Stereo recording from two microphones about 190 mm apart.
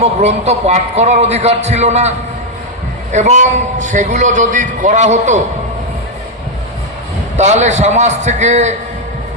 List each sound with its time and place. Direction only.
0.0 s a man's voice: 35° right (ahead or behind)
7.3 s a man's voice: 35° right (ahead or behind)